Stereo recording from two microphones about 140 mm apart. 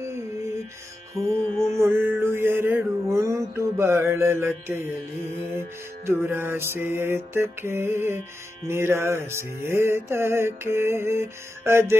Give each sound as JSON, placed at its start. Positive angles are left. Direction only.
{"t": 0.0, "sound": "music", "side_deg": -20}